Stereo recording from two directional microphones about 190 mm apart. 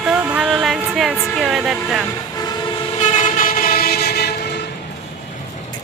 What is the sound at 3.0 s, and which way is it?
Train, 40° left (ahead or behind).